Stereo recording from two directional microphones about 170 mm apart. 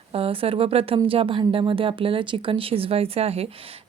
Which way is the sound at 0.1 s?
35° right (ahead or behind).